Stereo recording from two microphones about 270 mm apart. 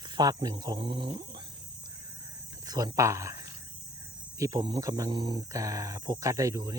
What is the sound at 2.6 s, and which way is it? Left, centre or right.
Speech, centre.